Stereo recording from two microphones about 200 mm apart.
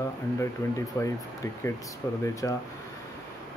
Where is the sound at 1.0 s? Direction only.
15° left (ahead or behind).